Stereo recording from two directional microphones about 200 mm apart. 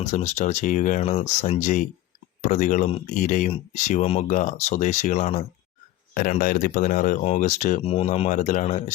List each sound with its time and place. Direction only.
0.0 s speech: 35° left (ahead or behind)